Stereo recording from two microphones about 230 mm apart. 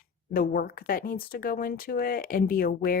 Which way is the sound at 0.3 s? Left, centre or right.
Left.